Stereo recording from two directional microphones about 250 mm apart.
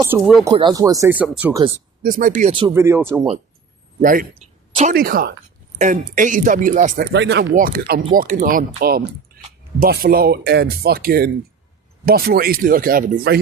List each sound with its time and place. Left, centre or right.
0.4 s speech: centre
2.0 s speech: right
2.5 s speech: centre
4.0 s speech: right
7.0 s speech: right